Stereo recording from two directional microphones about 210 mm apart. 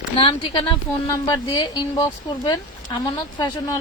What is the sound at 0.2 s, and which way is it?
Speech, 25° left (ahead or behind).